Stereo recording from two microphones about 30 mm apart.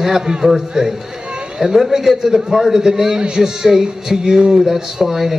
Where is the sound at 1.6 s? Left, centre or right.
Centre.